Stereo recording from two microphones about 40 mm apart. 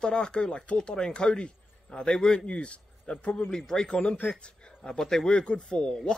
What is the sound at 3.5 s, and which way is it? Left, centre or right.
A man's voice, centre.